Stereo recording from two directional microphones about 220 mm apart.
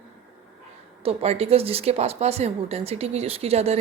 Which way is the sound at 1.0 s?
30° right (ahead or behind).